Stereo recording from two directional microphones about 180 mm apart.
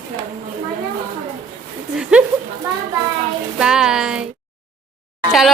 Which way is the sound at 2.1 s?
5° right (ahead or behind).